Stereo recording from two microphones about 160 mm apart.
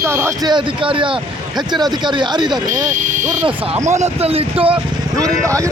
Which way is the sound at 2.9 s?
50° right (ahead or behind).